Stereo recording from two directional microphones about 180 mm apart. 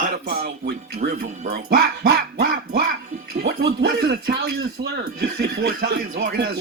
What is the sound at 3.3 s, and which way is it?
Music, 65° right (ahead or behind).